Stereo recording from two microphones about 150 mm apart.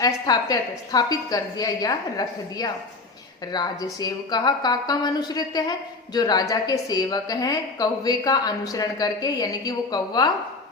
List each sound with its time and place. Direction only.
0.0 s a woman's voice: 25° left (ahead or behind)